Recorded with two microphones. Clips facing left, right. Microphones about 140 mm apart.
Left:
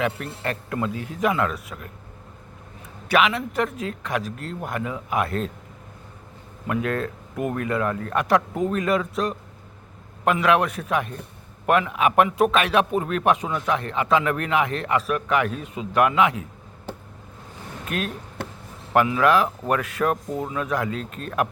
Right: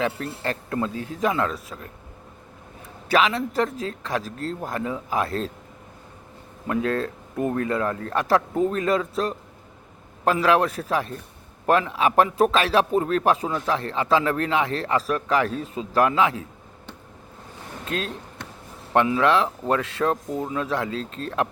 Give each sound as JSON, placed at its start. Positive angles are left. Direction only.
{"t": 0.0, "sound": "speech", "side_deg": -30}
{"t": 3.1, "sound": "speech", "side_deg": -35}
{"t": 6.7, "sound": "speech", "side_deg": -30}
{"t": 17.8, "sound": "speech", "side_deg": -25}